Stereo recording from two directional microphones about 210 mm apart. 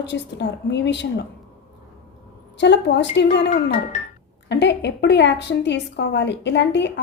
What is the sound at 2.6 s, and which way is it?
A woman's voice, 55° left (ahead or behind).